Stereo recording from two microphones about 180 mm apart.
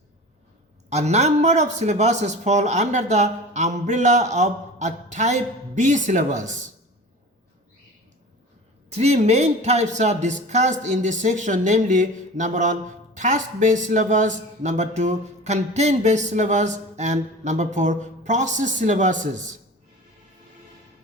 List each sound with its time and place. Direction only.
0.9 s speech: 40° right (ahead or behind)
8.9 s speech: 35° right (ahead or behind)